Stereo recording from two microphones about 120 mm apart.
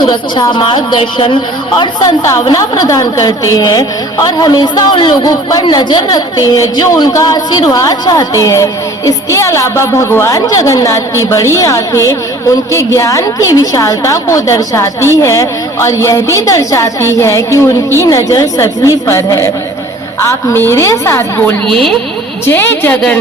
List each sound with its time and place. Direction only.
0.0 s a woman's voice: 40° left (ahead or behind); by 21.5 s 20° left (ahead or behind)
21.7 s speech: 5° left (ahead or behind)
22.4 s a woman's voice: 20° left (ahead or behind)